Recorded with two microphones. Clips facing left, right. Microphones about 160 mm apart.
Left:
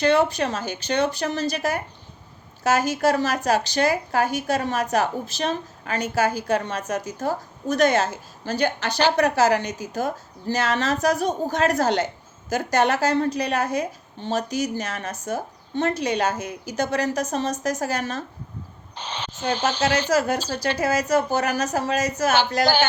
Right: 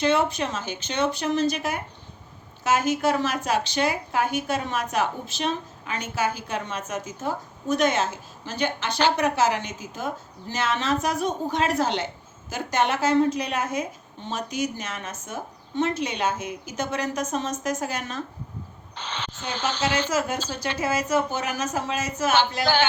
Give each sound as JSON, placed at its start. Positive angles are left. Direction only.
{"t": 0.3, "sound": "a woman's voice", "side_deg": 35}
{"t": 19.0, "sound": "speech", "side_deg": 10}
{"t": 20.1, "sound": "a woman's voice", "side_deg": 35}